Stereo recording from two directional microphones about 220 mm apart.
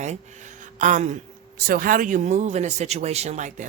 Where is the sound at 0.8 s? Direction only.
35° right (ahead or behind).